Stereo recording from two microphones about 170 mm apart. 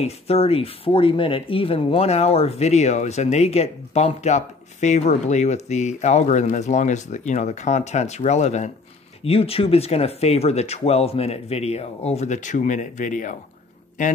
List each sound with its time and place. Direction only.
0.0 s speech: 35° left (ahead or behind)